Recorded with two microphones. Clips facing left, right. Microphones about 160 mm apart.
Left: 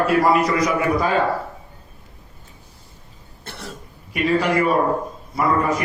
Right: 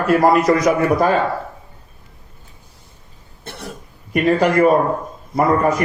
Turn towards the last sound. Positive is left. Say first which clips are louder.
# right 4 dB
turn(degrees=-45)  # may be behind; listen again after turning